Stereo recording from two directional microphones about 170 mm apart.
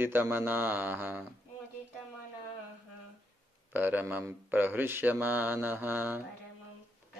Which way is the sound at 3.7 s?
10° right (ahead or behind).